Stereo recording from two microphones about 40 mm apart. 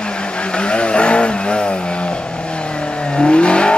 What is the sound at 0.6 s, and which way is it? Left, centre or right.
Vehicle, left.